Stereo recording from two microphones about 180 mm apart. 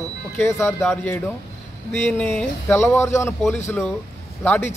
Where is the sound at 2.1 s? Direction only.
10° left (ahead or behind).